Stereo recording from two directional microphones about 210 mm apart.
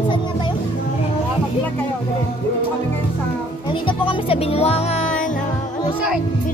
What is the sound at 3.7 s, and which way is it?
Speech, 25° left (ahead or behind).